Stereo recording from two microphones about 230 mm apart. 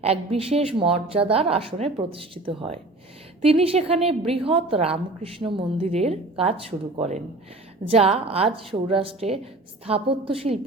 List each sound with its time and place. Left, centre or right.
0.0 s a woman's voice: right